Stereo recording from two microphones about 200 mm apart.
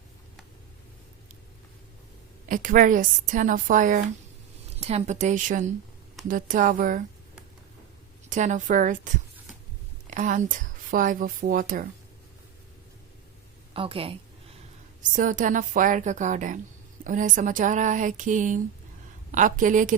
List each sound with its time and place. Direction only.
2.5 s speech: 45° right (ahead or behind)
8.3 s a woman's voice: 35° right (ahead or behind)
13.7 s a woman's voice: 25° right (ahead or behind)
15.1 s speech: 40° right (ahead or behind)